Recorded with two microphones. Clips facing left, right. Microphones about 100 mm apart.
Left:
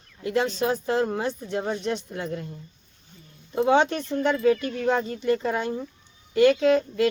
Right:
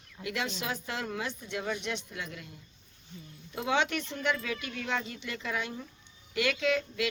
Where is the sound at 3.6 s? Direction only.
35° left (ahead or behind).